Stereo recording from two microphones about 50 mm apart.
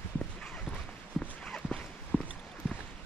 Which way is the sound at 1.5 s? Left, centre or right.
Centre.